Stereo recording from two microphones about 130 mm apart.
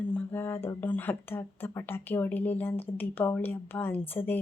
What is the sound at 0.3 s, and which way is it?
Speech, 15° left (ahead or behind).